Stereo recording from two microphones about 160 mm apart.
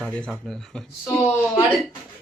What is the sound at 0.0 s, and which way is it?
Speech, 5° left (ahead or behind).